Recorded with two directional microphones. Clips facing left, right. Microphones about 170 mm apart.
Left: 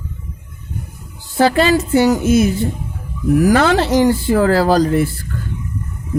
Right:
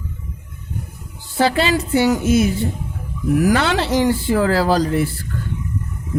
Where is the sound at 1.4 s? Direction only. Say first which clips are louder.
Left 4 dB; 45° left (ahead or behind).